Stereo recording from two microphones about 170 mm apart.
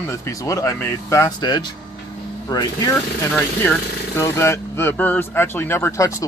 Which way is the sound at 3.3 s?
10° left (ahead or behind).